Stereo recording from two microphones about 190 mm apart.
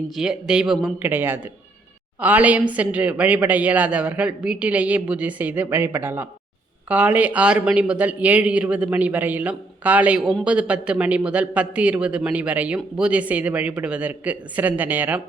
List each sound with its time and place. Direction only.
0.2 s a man's voice: 5° right (ahead or behind)